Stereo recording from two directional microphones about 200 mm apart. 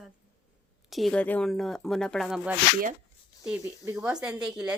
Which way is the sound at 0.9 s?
5° left (ahead or behind).